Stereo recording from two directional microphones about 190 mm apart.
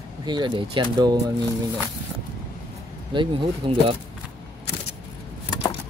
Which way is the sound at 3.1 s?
25° right (ahead or behind).